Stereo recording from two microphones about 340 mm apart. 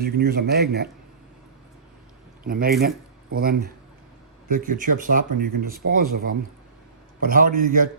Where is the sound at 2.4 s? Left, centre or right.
Right.